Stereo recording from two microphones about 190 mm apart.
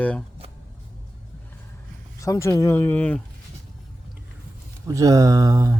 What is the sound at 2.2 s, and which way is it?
Speech, 15° left (ahead or behind).